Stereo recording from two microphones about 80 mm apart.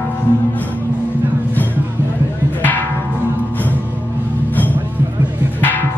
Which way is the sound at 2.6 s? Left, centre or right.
Left.